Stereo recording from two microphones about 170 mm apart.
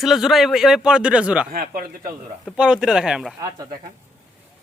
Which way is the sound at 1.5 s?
55° right (ahead or behind).